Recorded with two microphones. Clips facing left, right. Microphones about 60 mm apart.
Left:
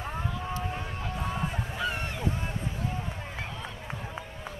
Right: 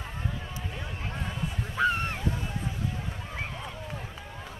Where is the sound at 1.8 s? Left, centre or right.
Right.